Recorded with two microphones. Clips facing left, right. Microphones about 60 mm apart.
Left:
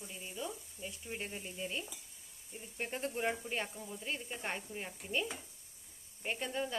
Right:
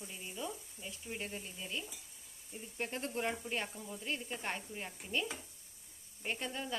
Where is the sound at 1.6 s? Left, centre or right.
Centre.